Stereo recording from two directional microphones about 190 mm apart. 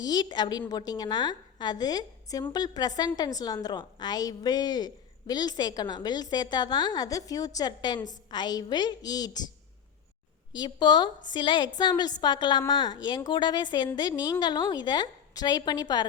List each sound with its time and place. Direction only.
0.0 s a woman's voice: 20° left (ahead or behind)
10.6 s a woman's voice: 20° left (ahead or behind)